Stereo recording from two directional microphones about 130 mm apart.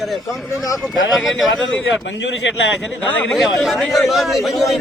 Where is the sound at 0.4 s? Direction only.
25° left (ahead or behind).